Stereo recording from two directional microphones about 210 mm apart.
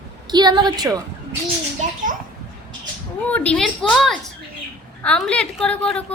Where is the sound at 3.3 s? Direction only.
5° left (ahead or behind).